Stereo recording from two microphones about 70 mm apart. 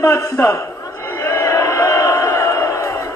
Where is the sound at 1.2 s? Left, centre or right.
Left.